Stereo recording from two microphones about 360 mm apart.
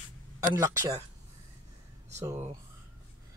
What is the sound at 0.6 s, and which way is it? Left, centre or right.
Speech, centre.